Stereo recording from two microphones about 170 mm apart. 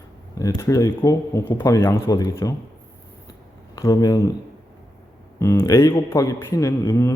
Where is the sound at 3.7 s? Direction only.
20° left (ahead or behind).